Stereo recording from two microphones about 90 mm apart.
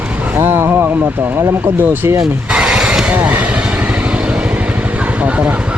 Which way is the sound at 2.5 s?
10° right (ahead or behind).